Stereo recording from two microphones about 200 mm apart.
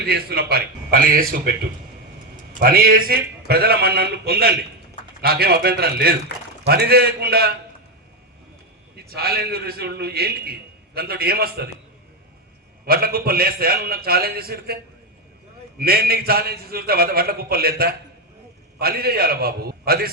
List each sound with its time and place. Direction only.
0.0 s a man's voice: 50° right (ahead or behind)
2.6 s a man's voice: 50° right (ahead or behind)
9.0 s a man's voice: 50° right (ahead or behind)
12.8 s a man's voice: 50° right (ahead or behind)
15.8 s a man's voice: 50° right (ahead or behind)